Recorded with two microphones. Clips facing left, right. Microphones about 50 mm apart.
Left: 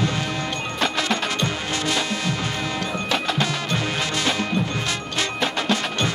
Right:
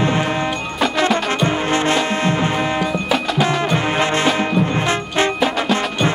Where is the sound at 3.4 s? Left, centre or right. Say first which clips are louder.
Right 7 dB; right.